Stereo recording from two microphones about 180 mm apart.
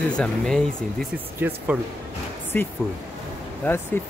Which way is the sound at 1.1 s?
10° right (ahead or behind).